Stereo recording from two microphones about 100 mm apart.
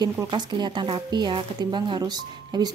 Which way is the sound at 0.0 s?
50° right (ahead or behind).